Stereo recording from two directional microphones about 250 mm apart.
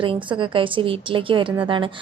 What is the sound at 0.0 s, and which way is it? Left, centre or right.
A woman's voice, centre.